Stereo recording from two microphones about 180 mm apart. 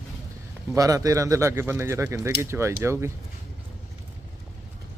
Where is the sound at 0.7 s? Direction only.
20° right (ahead or behind).